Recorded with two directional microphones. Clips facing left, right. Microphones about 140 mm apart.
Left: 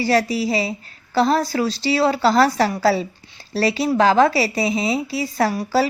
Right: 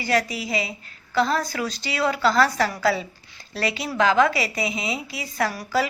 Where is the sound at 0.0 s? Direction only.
30° left (ahead or behind).